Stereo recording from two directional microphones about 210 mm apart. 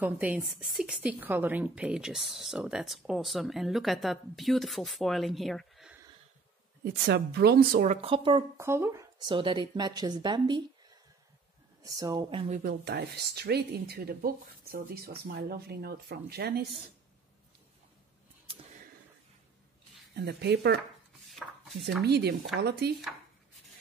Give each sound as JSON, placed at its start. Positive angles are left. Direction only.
{"t": 0.0, "sound": "a woman's voice", "side_deg": -10}
{"t": 6.8, "sound": "speech", "side_deg": -50}
{"t": 7.9, "sound": "speech", "side_deg": -25}
{"t": 11.8, "sound": "speech", "side_deg": -15}
{"t": 12.8, "sound": "speech", "side_deg": -50}
{"t": 20.2, "sound": "speech", "side_deg": -50}
{"t": 21.3, "sound": "chopping", "side_deg": 0}
{"t": 22.0, "sound": "speech", "side_deg": -50}